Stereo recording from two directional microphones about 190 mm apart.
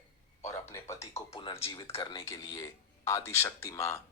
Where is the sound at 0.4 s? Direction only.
15° left (ahead or behind).